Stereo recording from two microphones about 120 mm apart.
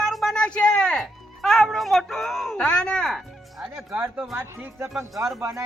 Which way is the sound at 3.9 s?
15° right (ahead or behind).